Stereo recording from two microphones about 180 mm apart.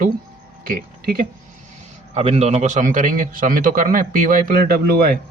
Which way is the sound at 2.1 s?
35° right (ahead or behind).